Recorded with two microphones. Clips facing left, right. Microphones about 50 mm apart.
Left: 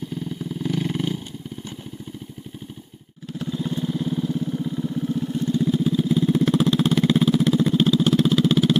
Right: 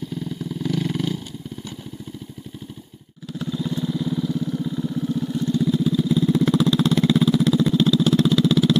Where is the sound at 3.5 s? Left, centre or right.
Left.